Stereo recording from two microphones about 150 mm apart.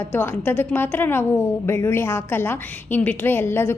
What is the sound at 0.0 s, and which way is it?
A woman's voice, 10° left (ahead or behind).